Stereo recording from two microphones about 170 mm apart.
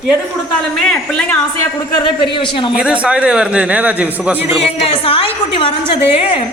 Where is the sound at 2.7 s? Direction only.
5° right (ahead or behind).